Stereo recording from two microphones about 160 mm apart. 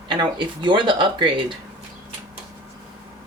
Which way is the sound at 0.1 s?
30° right (ahead or behind).